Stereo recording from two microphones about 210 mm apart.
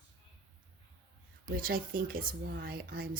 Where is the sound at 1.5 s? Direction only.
45° right (ahead or behind).